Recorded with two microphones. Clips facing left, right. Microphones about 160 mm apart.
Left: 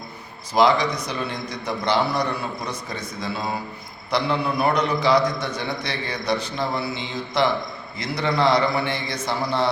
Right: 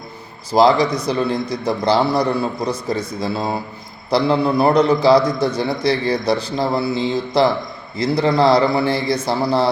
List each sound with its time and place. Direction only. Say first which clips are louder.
0.5 s a man's voice: right 5 dB; 35° right (ahead or behind)